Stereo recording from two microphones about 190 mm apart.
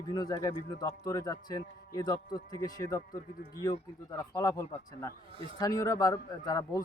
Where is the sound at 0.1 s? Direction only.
20° left (ahead or behind).